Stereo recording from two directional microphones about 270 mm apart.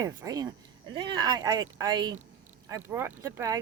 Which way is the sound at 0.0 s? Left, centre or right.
Centre.